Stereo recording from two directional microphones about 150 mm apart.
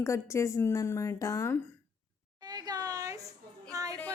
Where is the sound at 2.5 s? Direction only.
25° right (ahead or behind).